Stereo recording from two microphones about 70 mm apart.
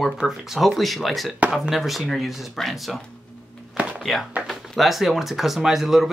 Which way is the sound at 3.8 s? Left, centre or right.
Centre.